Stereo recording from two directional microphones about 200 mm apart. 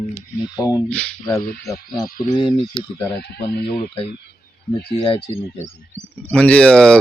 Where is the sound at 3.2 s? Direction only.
55° left (ahead or behind).